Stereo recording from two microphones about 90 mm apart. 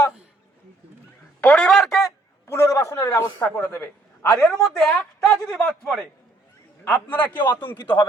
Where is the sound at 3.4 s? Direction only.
25° left (ahead or behind).